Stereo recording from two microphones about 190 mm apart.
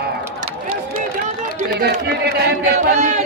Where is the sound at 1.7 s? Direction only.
55° right (ahead or behind).